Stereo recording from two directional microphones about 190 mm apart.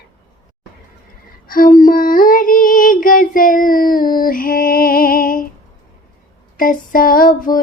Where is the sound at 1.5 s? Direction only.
50° left (ahead or behind).